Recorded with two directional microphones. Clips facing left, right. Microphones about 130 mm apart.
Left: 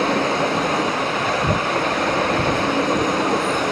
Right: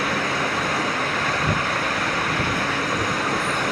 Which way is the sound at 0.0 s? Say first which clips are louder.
Left 5 dB; 25° left (ahead or behind).